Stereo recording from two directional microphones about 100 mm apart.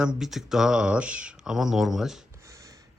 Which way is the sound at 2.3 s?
30° right (ahead or behind).